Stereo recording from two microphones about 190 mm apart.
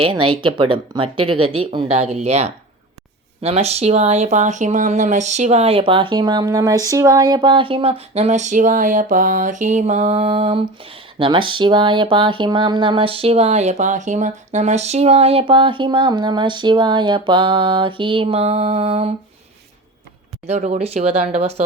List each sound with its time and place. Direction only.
0.0 s speech: 25° right (ahead or behind)
20.5 s speech: 35° right (ahead or behind)